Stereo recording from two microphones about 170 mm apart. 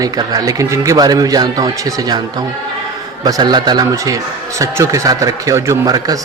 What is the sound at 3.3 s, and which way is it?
Speech, 25° right (ahead or behind).